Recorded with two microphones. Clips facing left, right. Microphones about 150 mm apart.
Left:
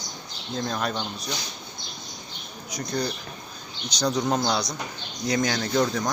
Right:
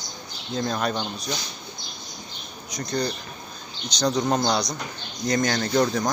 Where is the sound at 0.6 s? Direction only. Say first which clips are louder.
Right 2 dB; centre (ahead or behind).